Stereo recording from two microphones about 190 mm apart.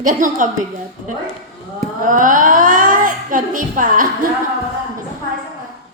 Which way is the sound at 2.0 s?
45° right (ahead or behind).